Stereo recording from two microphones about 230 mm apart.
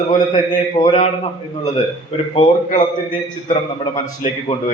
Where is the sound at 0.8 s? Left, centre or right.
Left.